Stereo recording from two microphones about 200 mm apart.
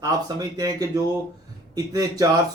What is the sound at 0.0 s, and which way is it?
Speech, 20° right (ahead or behind).